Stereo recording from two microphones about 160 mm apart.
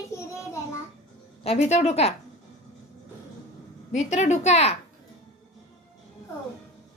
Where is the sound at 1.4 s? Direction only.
40° left (ahead or behind).